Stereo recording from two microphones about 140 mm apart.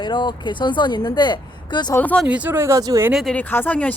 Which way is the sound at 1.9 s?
10° left (ahead or behind).